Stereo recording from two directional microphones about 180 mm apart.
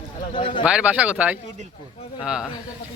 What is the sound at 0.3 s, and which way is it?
Speech, 25° left (ahead or behind).